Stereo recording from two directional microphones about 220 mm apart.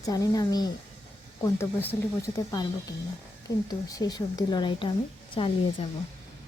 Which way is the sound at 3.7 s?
15° left (ahead or behind).